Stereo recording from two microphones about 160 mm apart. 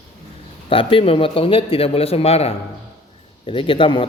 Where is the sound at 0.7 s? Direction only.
35° left (ahead or behind).